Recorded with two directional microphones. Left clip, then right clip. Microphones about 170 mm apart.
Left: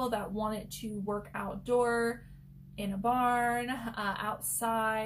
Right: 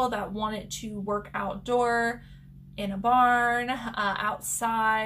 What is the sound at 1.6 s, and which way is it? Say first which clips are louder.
A woman's voice: right 4 dB; 20° right (ahead or behind).